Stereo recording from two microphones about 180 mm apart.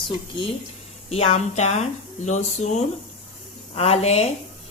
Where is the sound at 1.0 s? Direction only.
35° left (ahead or behind).